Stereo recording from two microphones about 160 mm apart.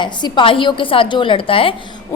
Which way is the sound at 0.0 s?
30° left (ahead or behind).